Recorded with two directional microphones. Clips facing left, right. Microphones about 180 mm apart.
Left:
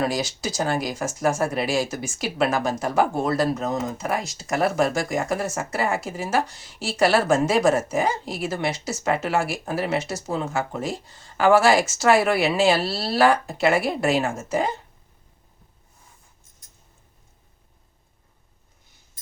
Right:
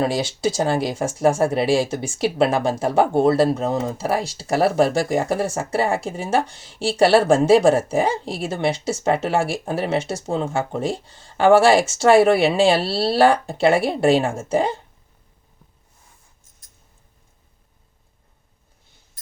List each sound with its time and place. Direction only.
0.0 s speech: 30° right (ahead or behind)